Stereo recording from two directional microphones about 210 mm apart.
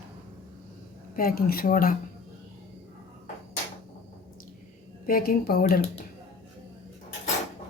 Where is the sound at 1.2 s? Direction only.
45° left (ahead or behind).